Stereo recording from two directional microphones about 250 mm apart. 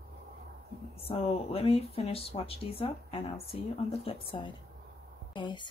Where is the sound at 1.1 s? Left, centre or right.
Left.